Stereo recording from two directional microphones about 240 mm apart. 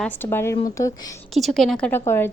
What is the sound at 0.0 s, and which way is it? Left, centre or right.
A woman's voice, centre.